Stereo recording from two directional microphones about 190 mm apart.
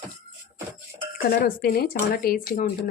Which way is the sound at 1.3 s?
55° left (ahead or behind).